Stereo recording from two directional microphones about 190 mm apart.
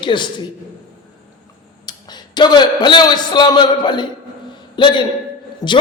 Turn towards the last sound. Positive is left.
turn(degrees=20)  # may be behind; listen again after turning